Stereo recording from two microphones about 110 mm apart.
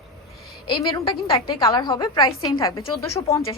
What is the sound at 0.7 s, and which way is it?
A woman's voice, 40° left (ahead or behind).